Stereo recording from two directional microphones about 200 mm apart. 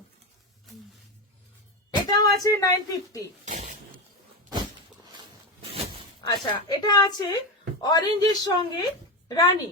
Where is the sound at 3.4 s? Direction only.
40° right (ahead or behind).